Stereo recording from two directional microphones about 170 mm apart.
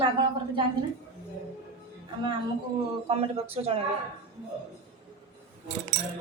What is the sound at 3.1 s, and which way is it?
Speech, 35° right (ahead or behind).